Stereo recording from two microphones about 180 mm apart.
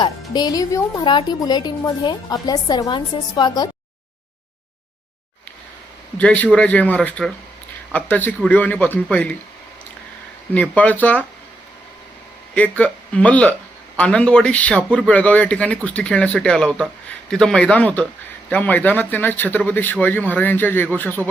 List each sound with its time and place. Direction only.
0.3 s a woman's voice: 20° left (ahead or behind)
6.1 s speech: 10° left (ahead or behind)
10.5 s speech: 10° left (ahead or behind)
12.5 s speech: 10° left (ahead or behind)